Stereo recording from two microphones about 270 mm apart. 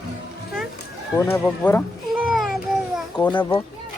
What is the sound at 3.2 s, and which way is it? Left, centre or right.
Speech, centre.